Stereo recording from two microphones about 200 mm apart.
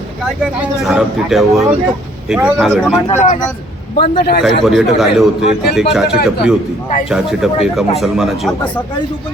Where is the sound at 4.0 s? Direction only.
50° left (ahead or behind).